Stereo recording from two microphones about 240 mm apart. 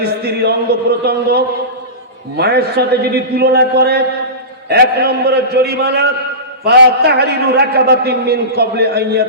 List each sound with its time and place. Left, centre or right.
0.0 s a man's voice: right